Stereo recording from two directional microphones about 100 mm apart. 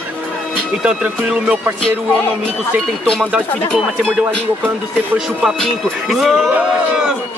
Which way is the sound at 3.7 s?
Centre (ahead or behind).